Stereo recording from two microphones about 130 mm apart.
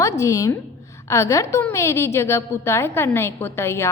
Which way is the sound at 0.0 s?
25° left (ahead or behind).